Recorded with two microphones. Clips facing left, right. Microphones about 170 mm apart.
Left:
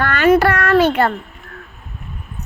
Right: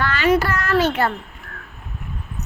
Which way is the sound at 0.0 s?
50° left (ahead or behind).